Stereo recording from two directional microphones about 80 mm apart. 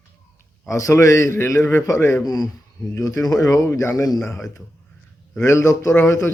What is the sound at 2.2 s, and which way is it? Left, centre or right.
Speech, left.